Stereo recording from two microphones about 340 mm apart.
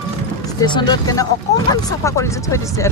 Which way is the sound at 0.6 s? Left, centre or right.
Centre.